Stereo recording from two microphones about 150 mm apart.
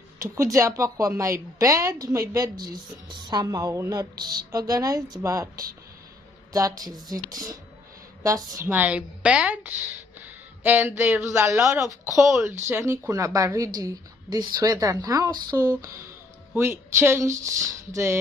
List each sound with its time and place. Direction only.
0.2 s a woman's voice: 20° right (ahead or behind)
6.5 s a woman's voice: 25° right (ahead or behind)
8.6 s a woman's voice: 10° right (ahead or behind)